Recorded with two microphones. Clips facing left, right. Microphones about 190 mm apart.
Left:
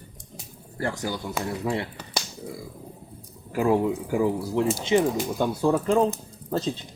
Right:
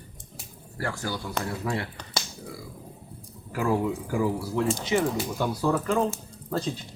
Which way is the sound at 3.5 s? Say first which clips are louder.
Left 4 dB; 20° left (ahead or behind).